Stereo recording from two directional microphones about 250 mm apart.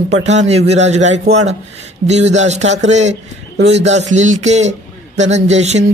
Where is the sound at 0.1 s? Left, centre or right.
Right.